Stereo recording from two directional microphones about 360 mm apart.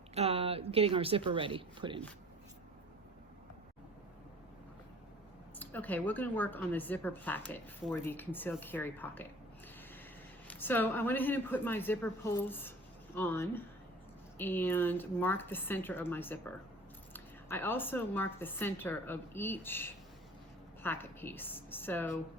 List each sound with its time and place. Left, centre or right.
0.1 s speech: centre
5.5 s a woman's voice: centre
10.5 s a woman's voice: centre